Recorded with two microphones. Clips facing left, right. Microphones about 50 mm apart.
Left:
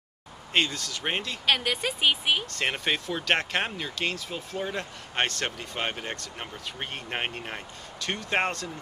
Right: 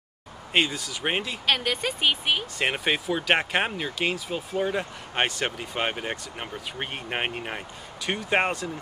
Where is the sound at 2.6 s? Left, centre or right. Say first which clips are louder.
Right 2 dB; centre.